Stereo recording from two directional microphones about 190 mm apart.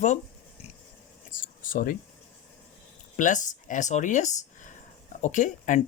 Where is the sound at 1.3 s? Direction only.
45° left (ahead or behind).